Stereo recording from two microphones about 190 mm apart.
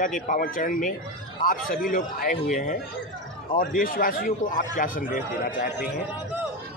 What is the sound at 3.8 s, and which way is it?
Speech, 50° left (ahead or behind).